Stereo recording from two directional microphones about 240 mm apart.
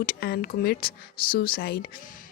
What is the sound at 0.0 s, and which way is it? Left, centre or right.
A woman's voice, left.